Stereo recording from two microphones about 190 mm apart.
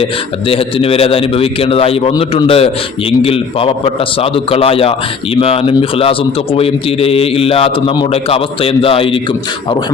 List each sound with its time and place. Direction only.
0.0 s a man's voice: 30° left (ahead or behind)